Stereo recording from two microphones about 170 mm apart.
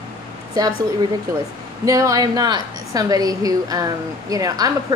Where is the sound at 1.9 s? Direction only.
20° right (ahead or behind).